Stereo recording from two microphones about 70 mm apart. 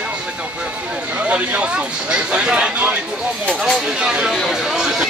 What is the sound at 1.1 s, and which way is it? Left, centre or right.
Speech, centre.